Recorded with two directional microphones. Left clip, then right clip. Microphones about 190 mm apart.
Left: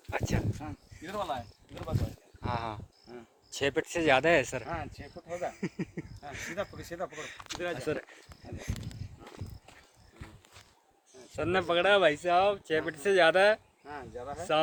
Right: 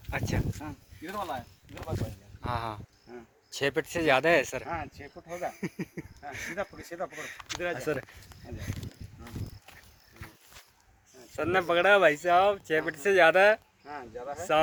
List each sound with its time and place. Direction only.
0.1 s a sound: 10° left (ahead or behind)
2.4 s speech: 10° left (ahead or behind)
7.3 s speech: 15° right (ahead or behind)
7.8 s speech: centre (ahead or behind)
11.1 s speech: 5° left (ahead or behind)